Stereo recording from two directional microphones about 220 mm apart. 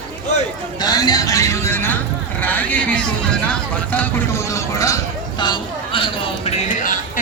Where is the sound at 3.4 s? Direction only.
5° left (ahead or behind); by 6.5 s 25° left (ahead or behind).